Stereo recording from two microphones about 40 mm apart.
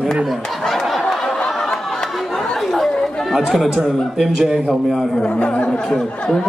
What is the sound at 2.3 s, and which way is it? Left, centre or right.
Chatter, centre.